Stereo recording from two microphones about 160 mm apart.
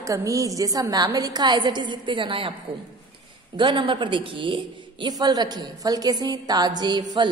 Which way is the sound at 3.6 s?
30° right (ahead or behind).